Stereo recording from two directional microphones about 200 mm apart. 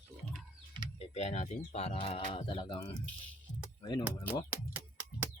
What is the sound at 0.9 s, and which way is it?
Speech, 35° left (ahead or behind).